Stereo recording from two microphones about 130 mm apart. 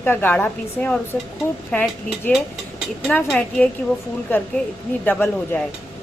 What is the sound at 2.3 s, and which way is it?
Speech, centre (ahead or behind).